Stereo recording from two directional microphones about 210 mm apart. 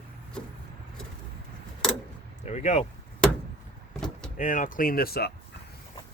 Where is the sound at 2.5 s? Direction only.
30° left (ahead or behind).